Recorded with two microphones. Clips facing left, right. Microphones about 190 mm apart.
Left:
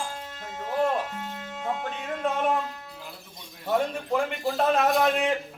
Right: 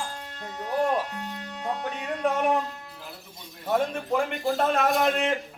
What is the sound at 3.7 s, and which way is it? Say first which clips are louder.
A man's voice: even; centre (ahead or behind).